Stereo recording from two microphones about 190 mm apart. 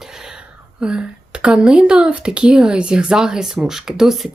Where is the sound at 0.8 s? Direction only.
5° right (ahead or behind).